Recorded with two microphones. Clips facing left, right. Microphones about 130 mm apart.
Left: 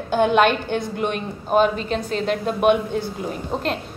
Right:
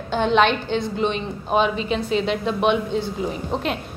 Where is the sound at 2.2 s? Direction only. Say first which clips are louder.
Left 1 dB; 45° left (ahead or behind).